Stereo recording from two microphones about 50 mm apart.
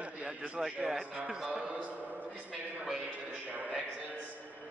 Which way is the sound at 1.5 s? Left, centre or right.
Right.